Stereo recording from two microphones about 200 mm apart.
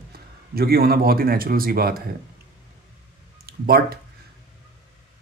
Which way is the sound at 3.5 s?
50° right (ahead or behind).